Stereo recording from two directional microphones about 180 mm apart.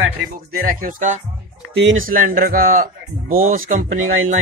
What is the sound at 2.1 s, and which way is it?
Speech, 50° right (ahead or behind).